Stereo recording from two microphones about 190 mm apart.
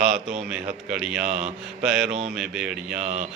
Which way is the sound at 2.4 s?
5° right (ahead or behind).